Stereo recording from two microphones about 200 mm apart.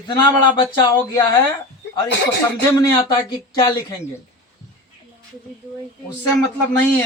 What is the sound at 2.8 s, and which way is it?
A man's voice, 20° left (ahead or behind).